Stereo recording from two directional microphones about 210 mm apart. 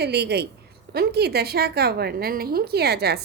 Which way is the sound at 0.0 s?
50° right (ahead or behind).